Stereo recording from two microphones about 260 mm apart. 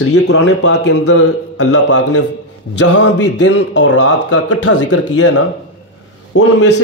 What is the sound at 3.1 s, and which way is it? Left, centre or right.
Speech, left.